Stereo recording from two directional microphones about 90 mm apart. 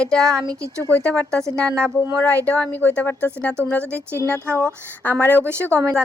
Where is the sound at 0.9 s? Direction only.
15° left (ahead or behind).